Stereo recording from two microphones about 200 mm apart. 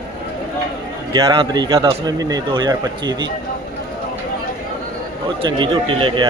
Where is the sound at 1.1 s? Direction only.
20° right (ahead or behind).